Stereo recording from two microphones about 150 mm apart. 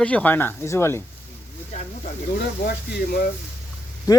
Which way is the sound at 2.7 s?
90° left.